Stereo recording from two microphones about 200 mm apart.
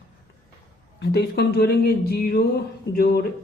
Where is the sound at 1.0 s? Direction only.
55° left (ahead or behind).